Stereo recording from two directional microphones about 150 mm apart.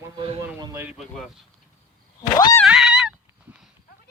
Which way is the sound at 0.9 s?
Centre (ahead or behind).